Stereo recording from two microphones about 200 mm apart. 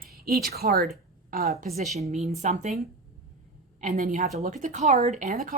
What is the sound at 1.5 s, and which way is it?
A woman's voice, 40° right (ahead or behind).